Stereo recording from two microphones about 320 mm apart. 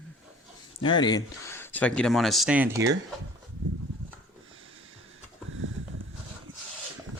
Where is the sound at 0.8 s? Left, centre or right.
Centre.